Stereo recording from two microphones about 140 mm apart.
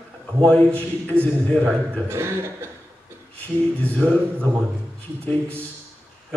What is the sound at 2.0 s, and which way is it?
Speech, 20° right (ahead or behind).